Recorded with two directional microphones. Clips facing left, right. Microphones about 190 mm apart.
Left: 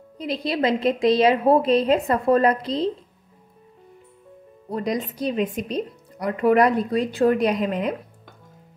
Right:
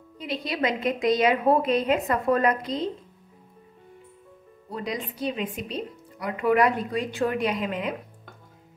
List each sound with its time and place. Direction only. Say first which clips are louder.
0.2 s speech: left 4 dB; 35° left (ahead or behind)
4.7 s speech: left 6 dB; 40° left (ahead or behind)